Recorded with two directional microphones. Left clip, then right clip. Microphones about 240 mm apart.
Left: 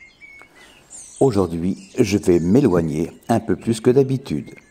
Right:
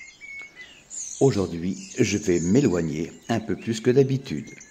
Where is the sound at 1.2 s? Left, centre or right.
Centre.